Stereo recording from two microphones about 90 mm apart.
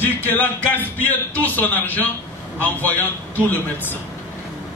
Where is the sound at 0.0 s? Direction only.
20° left (ahead or behind).